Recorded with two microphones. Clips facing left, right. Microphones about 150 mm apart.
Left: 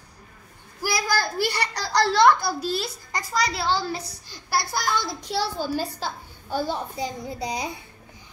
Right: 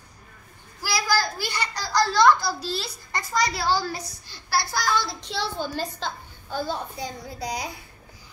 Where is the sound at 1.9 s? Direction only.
65° left (ahead or behind); by 3.2 s 50° left (ahead or behind).